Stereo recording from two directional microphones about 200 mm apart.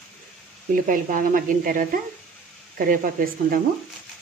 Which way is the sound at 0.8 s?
40° right (ahead or behind).